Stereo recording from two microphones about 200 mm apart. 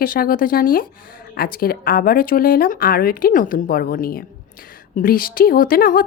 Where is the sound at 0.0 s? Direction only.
45° left (ahead or behind).